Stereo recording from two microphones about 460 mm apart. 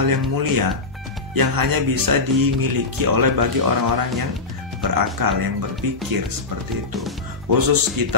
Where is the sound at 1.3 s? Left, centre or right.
Right.